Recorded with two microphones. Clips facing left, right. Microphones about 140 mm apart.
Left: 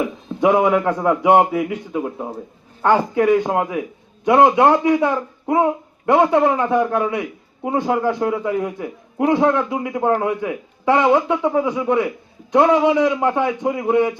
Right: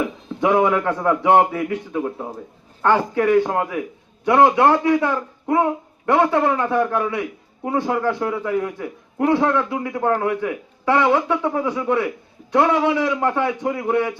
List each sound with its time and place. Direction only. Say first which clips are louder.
0.3 s a man's voice: left 2 dB; 15° left (ahead or behind)